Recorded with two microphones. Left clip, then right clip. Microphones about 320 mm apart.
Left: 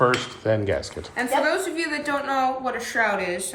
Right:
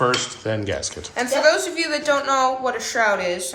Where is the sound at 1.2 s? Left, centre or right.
Centre.